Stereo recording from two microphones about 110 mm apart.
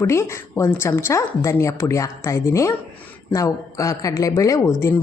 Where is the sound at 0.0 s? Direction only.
25° left (ahead or behind).